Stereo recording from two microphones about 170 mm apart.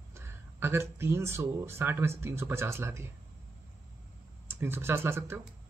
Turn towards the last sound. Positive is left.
turn(degrees=-15)  # may be behind; listen again after turning